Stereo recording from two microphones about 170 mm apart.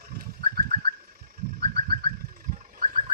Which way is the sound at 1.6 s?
65° right (ahead or behind).